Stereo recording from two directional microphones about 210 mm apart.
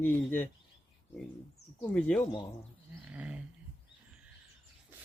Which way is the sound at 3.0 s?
5° right (ahead or behind).